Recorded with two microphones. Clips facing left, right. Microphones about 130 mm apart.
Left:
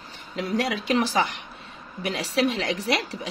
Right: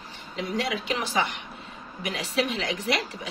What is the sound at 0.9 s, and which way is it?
Speech, 35° left (ahead or behind).